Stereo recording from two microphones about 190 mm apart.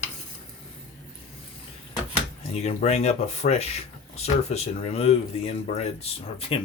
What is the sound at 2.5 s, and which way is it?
Speech, 35° left (ahead or behind).